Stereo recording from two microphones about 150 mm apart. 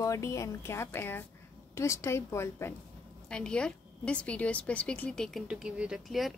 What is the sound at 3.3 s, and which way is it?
A woman's voice, 5° left (ahead or behind).